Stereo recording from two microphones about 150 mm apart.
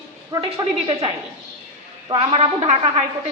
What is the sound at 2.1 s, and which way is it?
Speech, 40° right (ahead or behind).